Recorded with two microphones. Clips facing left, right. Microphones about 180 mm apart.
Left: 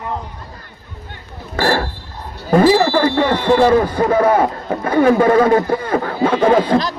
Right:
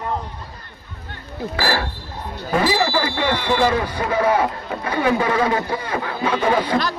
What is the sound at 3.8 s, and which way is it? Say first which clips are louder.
Speech: left 6 dB; 50° left (ahead or behind).